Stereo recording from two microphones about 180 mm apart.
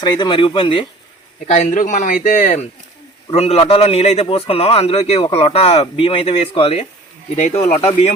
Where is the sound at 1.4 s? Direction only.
40° left (ahead or behind).